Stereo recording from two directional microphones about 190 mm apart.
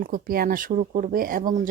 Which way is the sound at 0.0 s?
50° right (ahead or behind).